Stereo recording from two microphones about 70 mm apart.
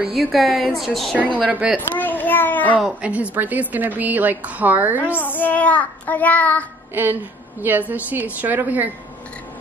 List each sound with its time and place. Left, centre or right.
0.1 s a woman's voice: centre
1.1 s a woman's voice: right
1.8 s children playing: left
3.0 s a woman's voice: centre
5.1 s child singing: left
6.9 s a woman's voice: right